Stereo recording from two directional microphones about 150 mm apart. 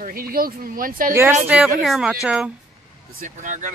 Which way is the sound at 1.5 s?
5° right (ahead or behind).